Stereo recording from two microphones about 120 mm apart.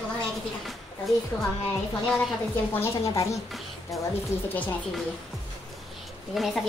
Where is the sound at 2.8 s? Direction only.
25° left (ahead or behind).